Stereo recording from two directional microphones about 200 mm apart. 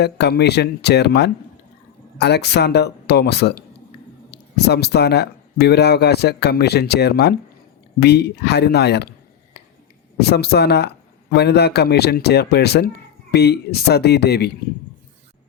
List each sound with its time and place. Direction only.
0.0 s speech: 55° left (ahead or behind)
10.2 s speech: 55° left (ahead or behind)